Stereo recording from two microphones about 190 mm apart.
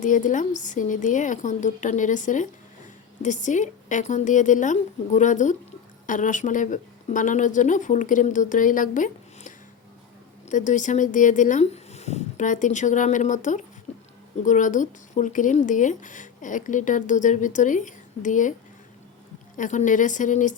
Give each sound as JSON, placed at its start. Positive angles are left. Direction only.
{"t": 0.0, "sound": "speech", "side_deg": 40}
{"t": 10.5, "sound": "speech", "side_deg": 40}
{"t": 19.5, "sound": "speech", "side_deg": 40}